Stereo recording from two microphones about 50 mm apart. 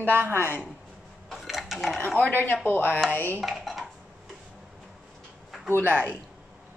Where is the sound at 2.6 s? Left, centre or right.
Left.